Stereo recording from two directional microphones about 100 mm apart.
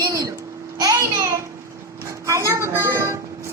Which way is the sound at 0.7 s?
40° right (ahead or behind).